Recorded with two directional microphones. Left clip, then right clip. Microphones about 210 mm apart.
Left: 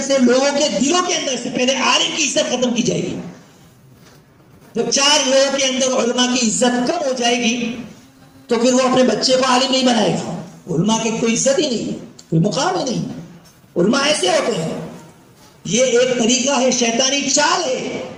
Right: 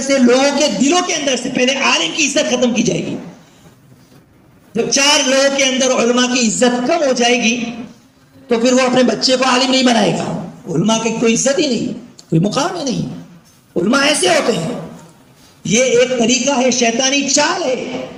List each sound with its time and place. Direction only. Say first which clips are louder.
0.0 s a man's voice: right 3 dB; 30° right (ahead or behind)
4.7 s a man's voice: right 2 dB; 30° right (ahead or behind)
15.6 s a man's voice: right 2 dB; 30° right (ahead or behind)